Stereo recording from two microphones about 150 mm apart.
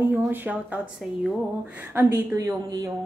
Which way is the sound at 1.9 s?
15° right (ahead or behind).